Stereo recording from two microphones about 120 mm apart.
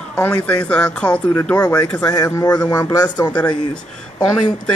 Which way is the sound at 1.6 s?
35° left (ahead or behind).